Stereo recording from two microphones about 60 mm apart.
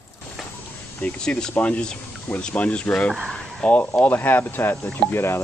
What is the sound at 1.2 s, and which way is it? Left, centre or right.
Speech, centre.